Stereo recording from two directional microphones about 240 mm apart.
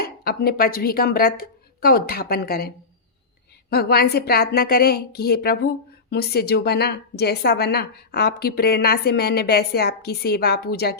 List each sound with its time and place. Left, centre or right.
0.0 s a woman's voice: left